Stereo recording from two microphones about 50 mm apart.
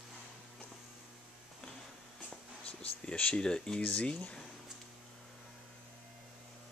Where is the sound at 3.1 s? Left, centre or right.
Left.